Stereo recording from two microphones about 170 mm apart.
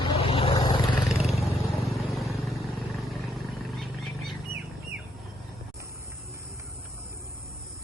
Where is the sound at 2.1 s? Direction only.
Centre (ahead or behind).